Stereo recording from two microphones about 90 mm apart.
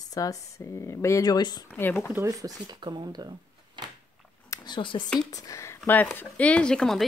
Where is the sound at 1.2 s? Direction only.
50° left (ahead or behind).